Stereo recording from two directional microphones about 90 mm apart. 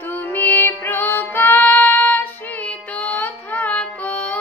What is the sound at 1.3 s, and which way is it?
Child singing, 20° left (ahead or behind).